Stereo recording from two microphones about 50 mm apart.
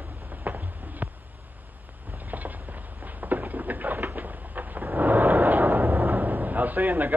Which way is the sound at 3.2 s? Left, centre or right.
Right.